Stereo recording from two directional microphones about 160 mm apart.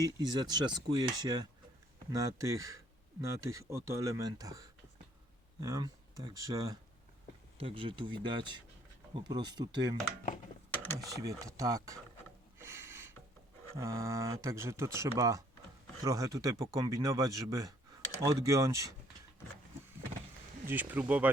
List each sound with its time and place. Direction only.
0.0 s speech: 25° right (ahead or behind)
7.6 s speech: 35° right (ahead or behind)
11.1 s speech: 20° right (ahead or behind)
12.5 s a sound: 15° right (ahead or behind)
13.7 s speech: 20° right (ahead or behind)
20.7 s speech: 10° right (ahead or behind)